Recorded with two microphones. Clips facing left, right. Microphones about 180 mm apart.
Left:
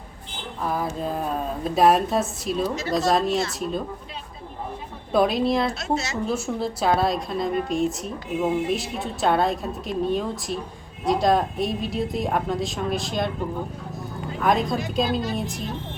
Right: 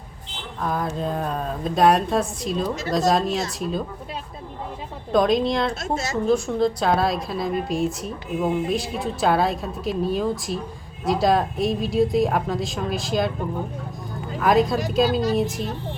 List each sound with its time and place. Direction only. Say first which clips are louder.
0.6 s speech: right 1 dB; 5° left (ahead or behind)
5.1 s speech: right 1 dB; 5° left (ahead or behind)
5.8 s a woman's voice: even; 50° right (ahead or behind)
6.2 s speech: right 6 dB; 5° left (ahead or behind)
14.3 s speech: right 3 dB; centre (ahead or behind)